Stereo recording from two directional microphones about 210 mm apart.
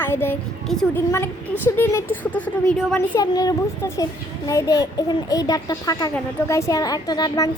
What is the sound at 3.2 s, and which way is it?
A woman's voice, 15° left (ahead or behind).